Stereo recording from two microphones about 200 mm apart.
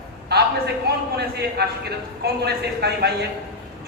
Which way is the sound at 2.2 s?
55° right (ahead or behind).